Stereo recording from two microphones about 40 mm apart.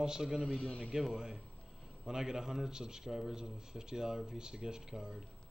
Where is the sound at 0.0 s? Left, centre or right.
Centre.